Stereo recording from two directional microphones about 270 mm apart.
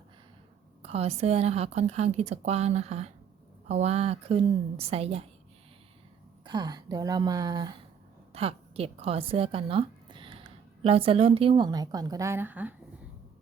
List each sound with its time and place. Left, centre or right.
0.8 s a woman's voice: right
6.4 s a woman's voice: centre